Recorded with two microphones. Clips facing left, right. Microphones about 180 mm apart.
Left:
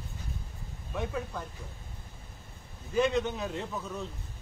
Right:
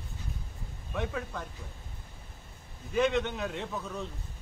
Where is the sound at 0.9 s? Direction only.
5° left (ahead or behind).